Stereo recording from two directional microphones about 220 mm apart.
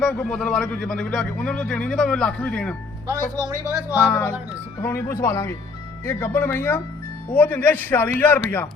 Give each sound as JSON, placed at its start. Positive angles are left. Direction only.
{"t": 0.0, "sound": "speech", "side_deg": 5}
{"t": 3.3, "sound": "speech", "side_deg": -20}
{"t": 4.1, "sound": "speech", "side_deg": 10}